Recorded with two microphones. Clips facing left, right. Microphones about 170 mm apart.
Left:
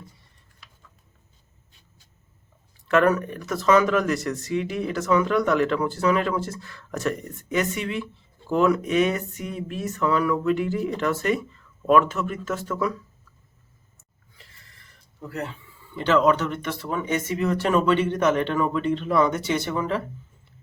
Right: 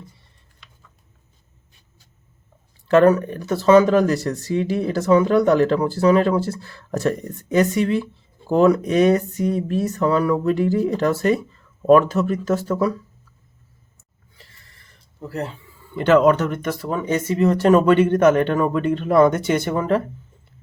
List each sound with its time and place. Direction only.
2.8 s speech: 30° right (ahead or behind)
15.2 s speech: 30° right (ahead or behind)
16.0 s speech: 50° right (ahead or behind)